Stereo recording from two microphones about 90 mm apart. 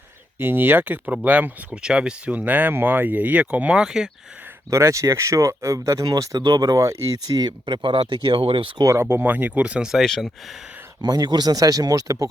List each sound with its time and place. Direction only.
0.3 s speech: 25° right (ahead or behind); by 4.1 s 5° right (ahead or behind)
4.7 s speech: 35° right (ahead or behind)
7.6 s speech: 65° right (ahead or behind); by 8.7 s 85° right
8.8 s speech: 30° right (ahead or behind); by 10.3 s 5° left (ahead or behind)
11.0 s speech: 50° right (ahead or behind)